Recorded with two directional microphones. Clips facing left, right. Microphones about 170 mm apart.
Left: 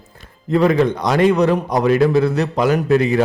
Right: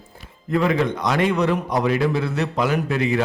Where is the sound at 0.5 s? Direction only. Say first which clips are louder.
Left 5 dB; 35° left (ahead or behind).